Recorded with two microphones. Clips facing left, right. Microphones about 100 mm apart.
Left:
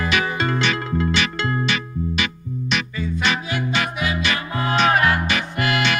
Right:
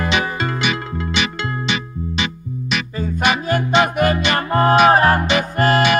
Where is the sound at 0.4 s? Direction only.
10° right (ahead or behind).